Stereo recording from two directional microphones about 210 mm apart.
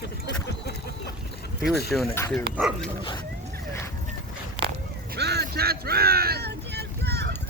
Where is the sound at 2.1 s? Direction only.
10° left (ahead or behind).